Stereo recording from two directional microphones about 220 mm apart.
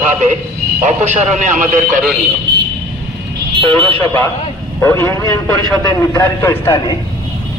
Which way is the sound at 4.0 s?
10° left (ahead or behind).